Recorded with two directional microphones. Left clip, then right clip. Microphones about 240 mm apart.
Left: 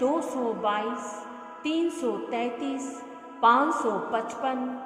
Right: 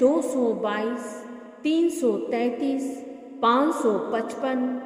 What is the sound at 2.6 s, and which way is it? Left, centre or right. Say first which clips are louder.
Speech: right 5 dB; centre.